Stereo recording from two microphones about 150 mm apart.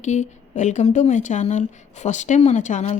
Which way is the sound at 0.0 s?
50° left (ahead or behind).